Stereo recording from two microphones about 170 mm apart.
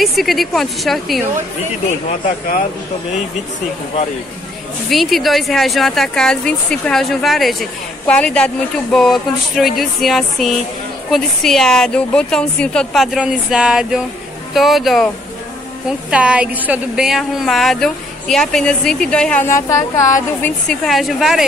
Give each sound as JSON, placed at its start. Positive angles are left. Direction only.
{"t": 0.0, "sound": "speech", "side_deg": 0}
{"t": 4.8, "sound": "speech", "side_deg": 0}
{"t": 16.1, "sound": "speech", "side_deg": -5}
{"t": 19.4, "sound": "speech", "side_deg": 15}
{"t": 20.4, "sound": "speech", "side_deg": 5}